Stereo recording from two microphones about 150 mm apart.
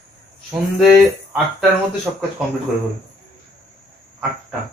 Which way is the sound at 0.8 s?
5° right (ahead or behind).